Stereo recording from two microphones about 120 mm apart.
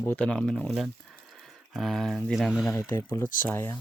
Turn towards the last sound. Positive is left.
turn(degrees=20)  # may be behind; listen again after turning